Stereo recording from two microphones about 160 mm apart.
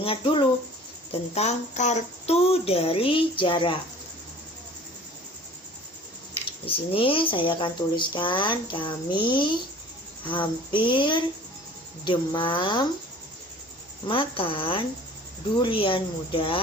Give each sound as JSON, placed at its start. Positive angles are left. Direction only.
{"t": 0.0, "sound": "speech", "side_deg": 35}
{"t": 6.7, "sound": "speech", "side_deg": 35}
{"t": 14.1, "sound": "speech", "side_deg": 35}